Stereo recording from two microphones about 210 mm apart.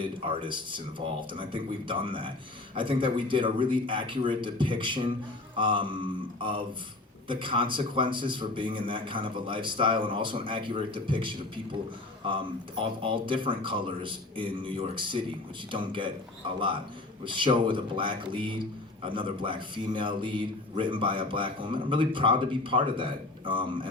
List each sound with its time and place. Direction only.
0.0 s a man's voice: 25° right (ahead or behind)
17.2 s a man's voice: 25° right (ahead or behind)